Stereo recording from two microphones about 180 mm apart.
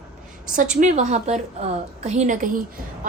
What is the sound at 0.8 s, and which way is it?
A woman's voice, 40° right (ahead or behind).